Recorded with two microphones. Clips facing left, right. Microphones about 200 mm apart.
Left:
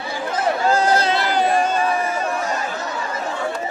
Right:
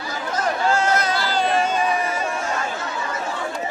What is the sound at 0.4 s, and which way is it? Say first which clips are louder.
Chatter: left 2 dB; 35° left (ahead or behind).